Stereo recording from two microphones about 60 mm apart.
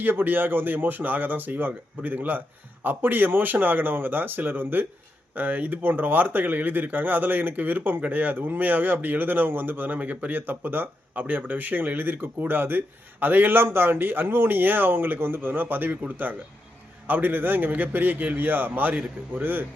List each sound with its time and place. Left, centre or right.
0.0 s a man's voice: right